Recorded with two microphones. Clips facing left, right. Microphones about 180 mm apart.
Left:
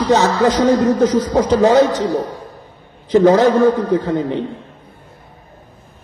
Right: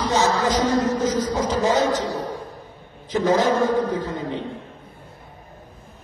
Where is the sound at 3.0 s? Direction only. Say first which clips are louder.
Left 9 dB; 65° left (ahead or behind).